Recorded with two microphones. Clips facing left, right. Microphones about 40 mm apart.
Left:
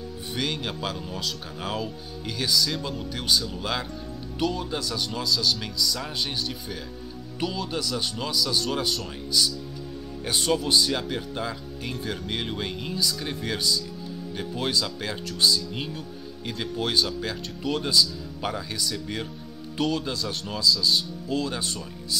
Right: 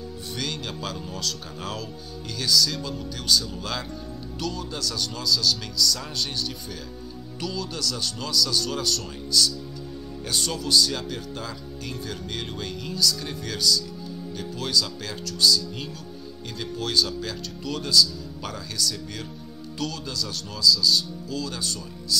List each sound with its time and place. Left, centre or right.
0.4 s speech: centre
7.3 s speech: left